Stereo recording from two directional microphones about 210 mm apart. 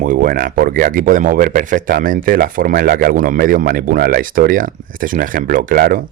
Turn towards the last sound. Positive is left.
turn(degrees=-40)  # may be behind; listen again after turning